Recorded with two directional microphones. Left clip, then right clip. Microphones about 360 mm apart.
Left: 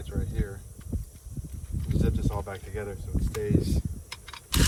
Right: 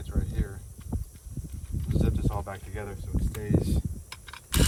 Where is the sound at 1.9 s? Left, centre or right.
Centre.